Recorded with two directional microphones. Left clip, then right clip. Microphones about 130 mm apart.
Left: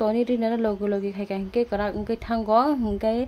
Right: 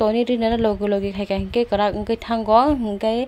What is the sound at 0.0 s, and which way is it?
A woman's voice, 25° right (ahead or behind).